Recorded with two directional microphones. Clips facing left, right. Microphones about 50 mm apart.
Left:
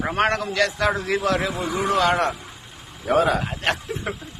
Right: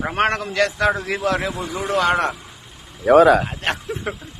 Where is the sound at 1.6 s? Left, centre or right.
Centre.